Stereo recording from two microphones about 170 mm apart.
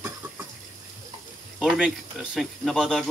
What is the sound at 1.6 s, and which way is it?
Speech, centre (ahead or behind).